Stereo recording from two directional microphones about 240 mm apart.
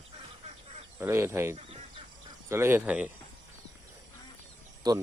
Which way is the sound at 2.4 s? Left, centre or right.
Centre.